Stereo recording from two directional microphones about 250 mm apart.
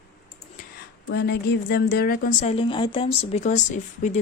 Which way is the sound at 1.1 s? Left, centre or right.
Left.